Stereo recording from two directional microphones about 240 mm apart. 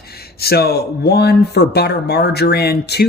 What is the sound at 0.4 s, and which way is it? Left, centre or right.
Speech, left.